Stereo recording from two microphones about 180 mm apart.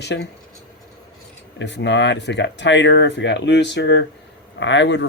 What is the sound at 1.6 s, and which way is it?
Speech, 80° left.